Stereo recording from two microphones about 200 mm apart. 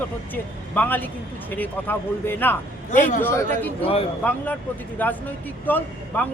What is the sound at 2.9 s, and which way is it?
Speech, 40° left (ahead or behind).